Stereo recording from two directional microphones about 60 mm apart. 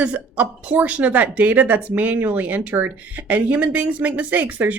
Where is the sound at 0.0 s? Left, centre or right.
Right.